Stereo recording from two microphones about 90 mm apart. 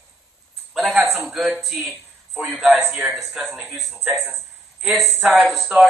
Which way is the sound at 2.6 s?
20° right (ahead or behind).